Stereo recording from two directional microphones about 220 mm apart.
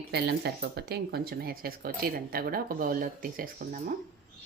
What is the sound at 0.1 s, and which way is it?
Speech, 50° right (ahead or behind).